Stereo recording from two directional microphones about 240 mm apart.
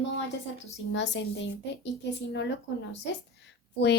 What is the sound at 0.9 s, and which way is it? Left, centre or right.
Speech, left.